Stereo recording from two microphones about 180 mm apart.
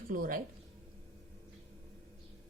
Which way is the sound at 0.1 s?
50° right (ahead or behind).